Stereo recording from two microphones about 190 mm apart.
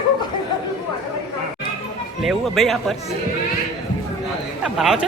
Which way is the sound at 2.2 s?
Centre (ahead or behind).